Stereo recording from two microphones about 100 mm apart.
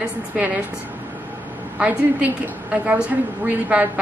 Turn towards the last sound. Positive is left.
turn(degrees=-15)  # may be behind; listen again after turning